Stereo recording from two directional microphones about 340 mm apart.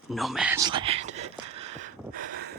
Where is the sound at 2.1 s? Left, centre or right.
Right.